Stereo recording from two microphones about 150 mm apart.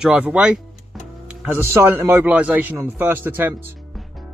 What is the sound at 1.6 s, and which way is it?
Speech, 15° right (ahead or behind).